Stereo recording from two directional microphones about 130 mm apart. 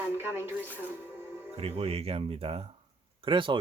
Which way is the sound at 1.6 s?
55° right (ahead or behind).